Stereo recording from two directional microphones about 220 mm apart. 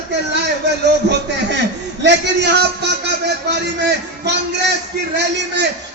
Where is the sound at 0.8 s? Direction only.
50° right (ahead or behind).